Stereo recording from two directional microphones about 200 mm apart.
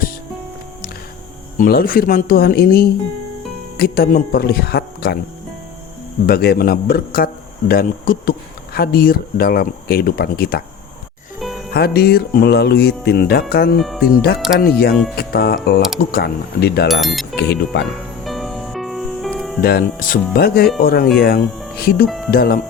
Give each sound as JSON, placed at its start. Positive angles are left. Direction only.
{"t": 1.5, "sound": "speech", "side_deg": 45}
{"t": 6.2, "sound": "speech", "side_deg": 50}
{"t": 11.3, "sound": "music", "side_deg": 0}
{"t": 11.7, "sound": "speech", "side_deg": 50}
{"t": 13.7, "sound": "speech", "side_deg": 0}
{"t": 14.6, "sound": "speech", "side_deg": 50}
{"t": 16.9, "sound": "speech", "side_deg": 0}
{"t": 18.3, "sound": "music", "side_deg": 0}
{"t": 19.6, "sound": "speech", "side_deg": 50}
{"t": 22.0, "sound": "speech", "side_deg": 0}
{"t": 22.3, "sound": "speech", "side_deg": 50}